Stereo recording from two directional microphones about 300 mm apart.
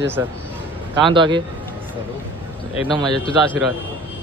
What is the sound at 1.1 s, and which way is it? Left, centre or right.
Speech, centre.